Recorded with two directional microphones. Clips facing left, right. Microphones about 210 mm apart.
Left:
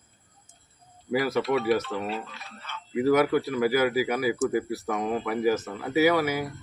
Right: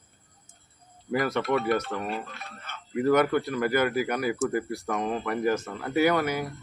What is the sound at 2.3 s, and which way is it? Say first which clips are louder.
Speech: even; 55° right (ahead or behind).